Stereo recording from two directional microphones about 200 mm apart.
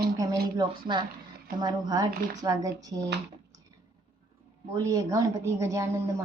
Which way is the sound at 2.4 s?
15° right (ahead or behind).